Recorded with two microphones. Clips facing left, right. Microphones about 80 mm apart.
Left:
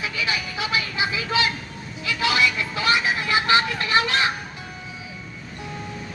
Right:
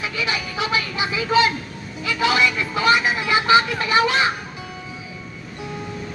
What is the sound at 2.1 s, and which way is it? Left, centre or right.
Speech, right.